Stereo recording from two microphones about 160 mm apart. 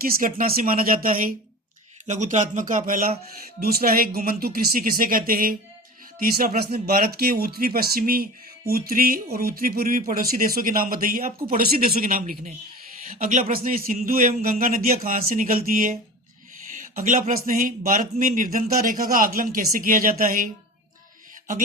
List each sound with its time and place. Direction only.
0.0 s speech: 65° right (ahead or behind)
2.0 s speech: 50° right (ahead or behind)
3.6 s speech: 70° right (ahead or behind)
16.7 s speech: 50° right (ahead or behind)